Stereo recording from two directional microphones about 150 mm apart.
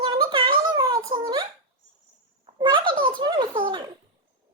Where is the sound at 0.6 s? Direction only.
25° right (ahead or behind).